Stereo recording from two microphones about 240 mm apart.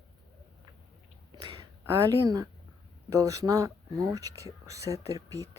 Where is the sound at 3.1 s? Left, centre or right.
Centre.